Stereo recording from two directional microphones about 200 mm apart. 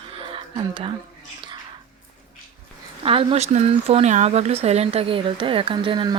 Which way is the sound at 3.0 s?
30° right (ahead or behind).